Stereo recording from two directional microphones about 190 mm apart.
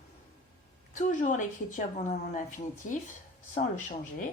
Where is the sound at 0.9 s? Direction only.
40° left (ahead or behind).